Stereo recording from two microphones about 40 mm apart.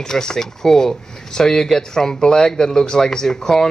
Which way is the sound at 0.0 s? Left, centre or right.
Centre.